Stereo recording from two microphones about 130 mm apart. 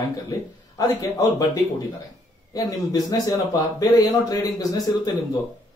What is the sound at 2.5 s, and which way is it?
A man's voice, 30° left (ahead or behind).